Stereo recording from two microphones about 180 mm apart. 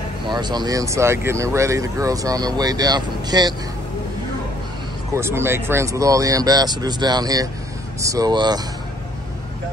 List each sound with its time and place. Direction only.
0.3 s speech: 25° right (ahead or behind)
5.1 s speech: 15° right (ahead or behind)